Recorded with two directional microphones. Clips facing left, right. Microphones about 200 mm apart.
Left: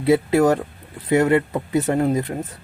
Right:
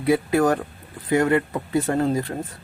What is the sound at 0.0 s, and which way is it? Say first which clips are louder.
Speech: left 3 dB; 25° left (ahead or behind).